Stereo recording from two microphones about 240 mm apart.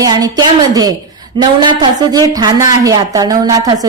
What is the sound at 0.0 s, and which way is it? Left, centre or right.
A woman's voice, centre.